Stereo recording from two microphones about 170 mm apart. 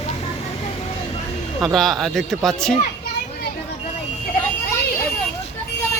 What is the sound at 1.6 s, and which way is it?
Speech, centre (ahead or behind).